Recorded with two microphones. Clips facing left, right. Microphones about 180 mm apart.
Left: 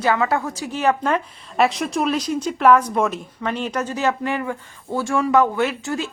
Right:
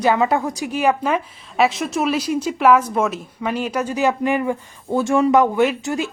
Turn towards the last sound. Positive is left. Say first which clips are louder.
# right 4 dB
turn(degrees=-15)  # may be behind; listen again after turning